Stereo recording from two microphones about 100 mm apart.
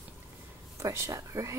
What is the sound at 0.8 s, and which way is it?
Speech, 30° right (ahead or behind).